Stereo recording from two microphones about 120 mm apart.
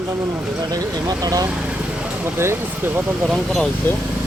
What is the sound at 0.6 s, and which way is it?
Speech, 30° right (ahead or behind).